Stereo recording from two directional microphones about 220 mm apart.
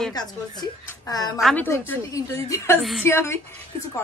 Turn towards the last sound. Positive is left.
turn(degrees=10)  # may be behind; listen again after turning